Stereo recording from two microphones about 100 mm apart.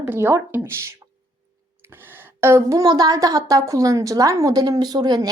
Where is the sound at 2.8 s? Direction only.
40° right (ahead or behind).